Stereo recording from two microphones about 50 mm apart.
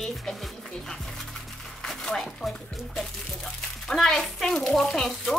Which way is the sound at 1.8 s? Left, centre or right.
Centre.